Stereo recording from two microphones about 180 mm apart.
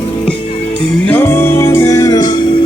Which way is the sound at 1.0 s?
10° left (ahead or behind).